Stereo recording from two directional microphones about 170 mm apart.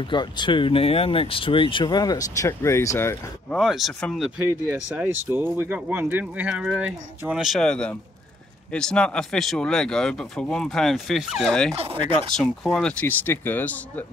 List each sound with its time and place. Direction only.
0.0 s speech: 25° left (ahead or behind)
3.5 s speech: centre (ahead or behind)
4.6 s speech: 10° right (ahead or behind)
11.7 s speech: 35° right (ahead or behind)
12.4 s speech: 5° left (ahead or behind)